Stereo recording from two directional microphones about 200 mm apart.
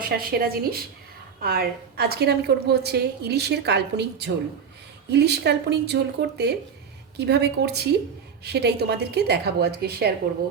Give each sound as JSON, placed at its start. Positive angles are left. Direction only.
{"t": 0.0, "sound": "a woman's voice", "side_deg": -50}